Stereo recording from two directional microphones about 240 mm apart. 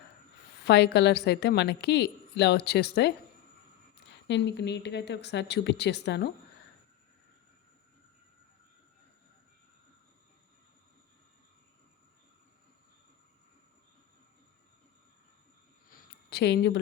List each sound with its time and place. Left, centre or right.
0.6 s a woman's voice: left
4.3 s a woman's voice: left
15.9 s a sound: left